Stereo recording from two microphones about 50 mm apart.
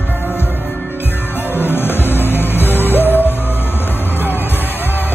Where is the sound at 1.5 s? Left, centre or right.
Left.